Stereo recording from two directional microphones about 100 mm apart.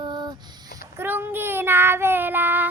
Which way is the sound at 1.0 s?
20° right (ahead or behind).